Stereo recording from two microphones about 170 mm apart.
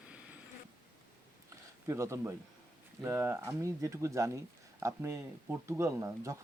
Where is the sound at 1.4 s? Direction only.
15° right (ahead or behind).